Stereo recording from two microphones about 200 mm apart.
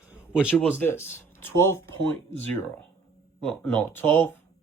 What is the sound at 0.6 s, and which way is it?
Speech, 10° left (ahead or behind).